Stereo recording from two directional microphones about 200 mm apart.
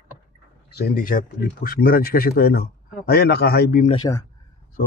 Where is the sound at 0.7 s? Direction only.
55° left (ahead or behind).